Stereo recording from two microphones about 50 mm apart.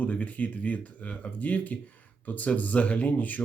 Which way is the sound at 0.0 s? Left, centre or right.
Left.